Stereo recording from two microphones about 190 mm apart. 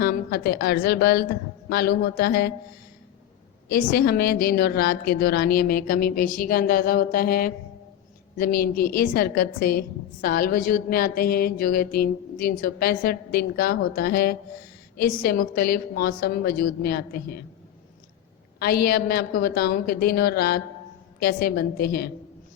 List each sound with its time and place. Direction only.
0.0 s a woman's voice: 50° left (ahead or behind)
3.7 s a woman's voice: 50° left (ahead or behind)
18.6 s a woman's voice: 55° left (ahead or behind)